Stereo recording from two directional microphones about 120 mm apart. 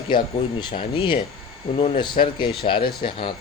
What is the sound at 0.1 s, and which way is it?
Speech, 45° left (ahead or behind).